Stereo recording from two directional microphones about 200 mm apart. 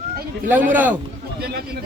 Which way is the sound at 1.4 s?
50° right (ahead or behind).